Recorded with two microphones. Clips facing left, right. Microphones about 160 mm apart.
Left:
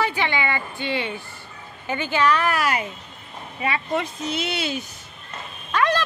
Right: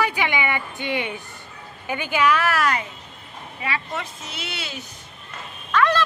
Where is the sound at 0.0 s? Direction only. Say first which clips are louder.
Even; 10° right (ahead or behind).